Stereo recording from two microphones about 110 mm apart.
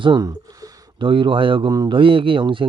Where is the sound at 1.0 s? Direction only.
50° right (ahead or behind).